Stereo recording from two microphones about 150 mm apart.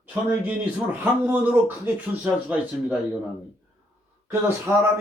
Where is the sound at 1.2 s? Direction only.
10° right (ahead or behind).